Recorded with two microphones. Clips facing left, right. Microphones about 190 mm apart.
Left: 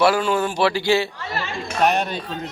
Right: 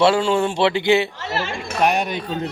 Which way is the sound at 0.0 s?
25° right (ahead or behind).